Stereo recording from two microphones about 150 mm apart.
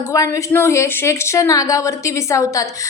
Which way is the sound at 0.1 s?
20° left (ahead or behind).